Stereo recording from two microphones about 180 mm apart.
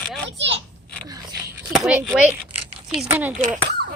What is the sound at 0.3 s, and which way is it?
Children playing, 85° right.